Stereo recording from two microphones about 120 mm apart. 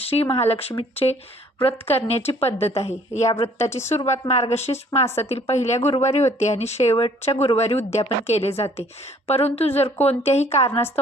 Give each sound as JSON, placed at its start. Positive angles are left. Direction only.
{"t": 0.0, "sound": "a woman's voice", "side_deg": 55}
{"t": 5.0, "sound": "a woman's voice", "side_deg": 20}
{"t": 5.3, "sound": "speech", "side_deg": 65}